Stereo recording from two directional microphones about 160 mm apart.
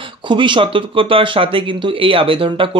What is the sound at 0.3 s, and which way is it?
Speech, 30° right (ahead or behind).